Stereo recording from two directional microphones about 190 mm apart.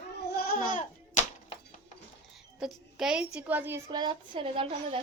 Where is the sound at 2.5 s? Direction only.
5° right (ahead or behind).